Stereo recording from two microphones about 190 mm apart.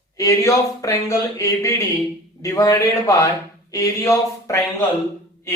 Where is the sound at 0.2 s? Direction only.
15° left (ahead or behind).